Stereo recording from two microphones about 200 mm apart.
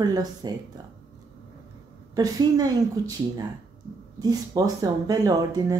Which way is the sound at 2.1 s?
20° right (ahead or behind).